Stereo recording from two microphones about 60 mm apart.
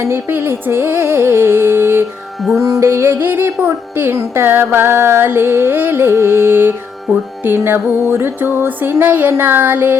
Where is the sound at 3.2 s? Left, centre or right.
Right.